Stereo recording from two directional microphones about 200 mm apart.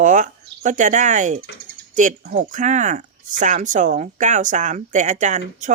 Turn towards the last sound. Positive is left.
turn(degrees=-35)  # may be behind; listen again after turning